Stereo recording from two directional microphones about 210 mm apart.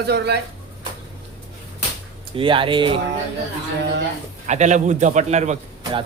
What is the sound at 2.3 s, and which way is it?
Speech, 25° right (ahead or behind).